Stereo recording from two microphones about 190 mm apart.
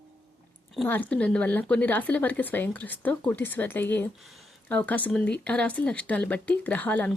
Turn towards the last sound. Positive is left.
turn(degrees=10)  # may be behind; listen again after turning